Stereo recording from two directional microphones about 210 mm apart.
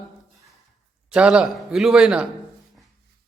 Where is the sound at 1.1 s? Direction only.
5° right (ahead or behind).